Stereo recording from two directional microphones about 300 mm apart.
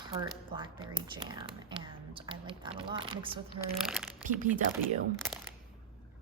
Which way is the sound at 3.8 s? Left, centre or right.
Centre.